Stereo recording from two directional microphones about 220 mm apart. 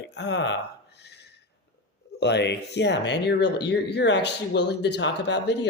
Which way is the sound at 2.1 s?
50° left (ahead or behind).